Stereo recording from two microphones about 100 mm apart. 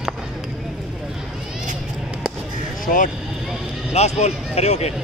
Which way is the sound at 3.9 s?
90° left.